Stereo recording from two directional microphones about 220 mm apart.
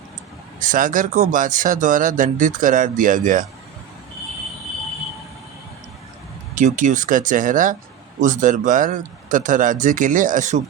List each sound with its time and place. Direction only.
0.6 s speech: 35° right (ahead or behind)
6.5 s speech: 35° right (ahead or behind)